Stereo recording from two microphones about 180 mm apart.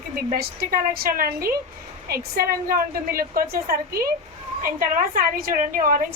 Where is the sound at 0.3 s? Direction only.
55° right (ahead or behind).